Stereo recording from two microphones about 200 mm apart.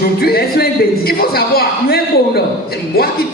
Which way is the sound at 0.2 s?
50° left (ahead or behind).